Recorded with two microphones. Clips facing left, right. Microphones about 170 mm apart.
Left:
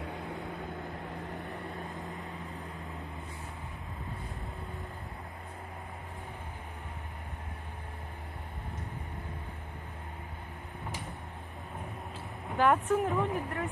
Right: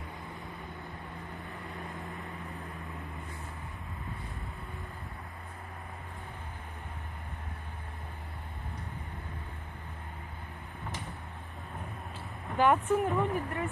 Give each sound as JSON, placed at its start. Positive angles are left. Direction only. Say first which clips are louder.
{"t": 0.0, "sound": "vehicle", "louder": "left 5 dB", "side_deg": 70}
{"t": 12.5, "sound": "a woman's voice", "louder": "right 1 dB", "side_deg": 0}